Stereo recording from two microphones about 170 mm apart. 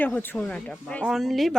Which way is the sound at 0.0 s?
10° left (ahead or behind).